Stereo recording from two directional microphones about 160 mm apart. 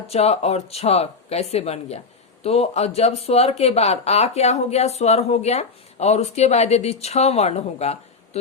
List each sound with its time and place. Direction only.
0.1 s speech: 40° left (ahead or behind)